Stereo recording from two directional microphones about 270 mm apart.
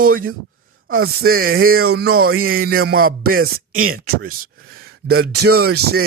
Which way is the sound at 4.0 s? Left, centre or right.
Right.